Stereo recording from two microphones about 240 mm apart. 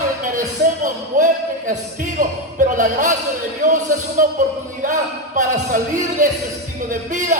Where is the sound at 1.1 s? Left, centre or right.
Right.